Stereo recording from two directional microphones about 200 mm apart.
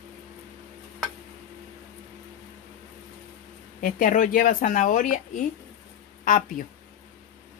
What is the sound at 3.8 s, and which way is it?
Speech, 40° left (ahead or behind).